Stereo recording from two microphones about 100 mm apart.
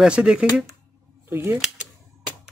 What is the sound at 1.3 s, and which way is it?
Speech, 25° right (ahead or behind).